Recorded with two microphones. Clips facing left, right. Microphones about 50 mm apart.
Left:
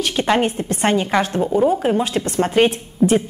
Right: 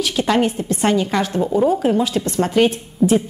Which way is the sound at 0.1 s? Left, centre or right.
Centre.